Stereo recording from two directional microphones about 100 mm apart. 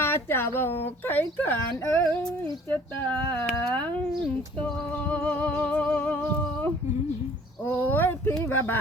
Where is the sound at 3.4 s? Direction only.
10° left (ahead or behind).